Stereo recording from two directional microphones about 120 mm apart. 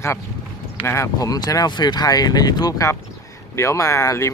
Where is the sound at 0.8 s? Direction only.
25° left (ahead or behind).